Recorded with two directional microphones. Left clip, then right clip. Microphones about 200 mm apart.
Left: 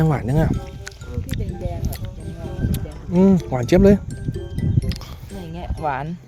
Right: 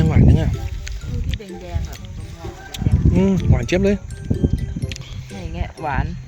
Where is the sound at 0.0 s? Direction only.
25° left (ahead or behind).